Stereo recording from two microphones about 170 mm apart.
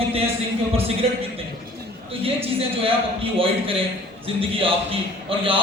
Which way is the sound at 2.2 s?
35° right (ahead or behind).